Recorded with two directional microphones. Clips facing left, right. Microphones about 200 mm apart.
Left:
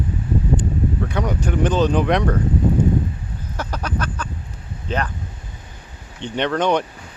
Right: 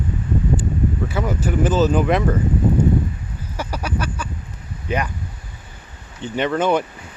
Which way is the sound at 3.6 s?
10° right (ahead or behind).